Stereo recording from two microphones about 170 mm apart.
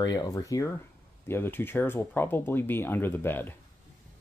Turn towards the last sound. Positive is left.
turn(degrees=10)  # may be behind; listen again after turning